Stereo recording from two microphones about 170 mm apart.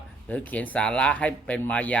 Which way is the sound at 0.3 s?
10° left (ahead or behind).